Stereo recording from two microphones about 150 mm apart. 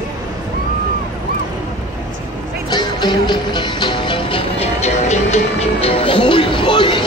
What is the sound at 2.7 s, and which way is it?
Music, 30° left (ahead or behind).